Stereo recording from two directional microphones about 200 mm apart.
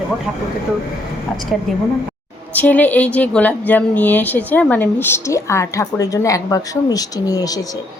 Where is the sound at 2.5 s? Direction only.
10° left (ahead or behind).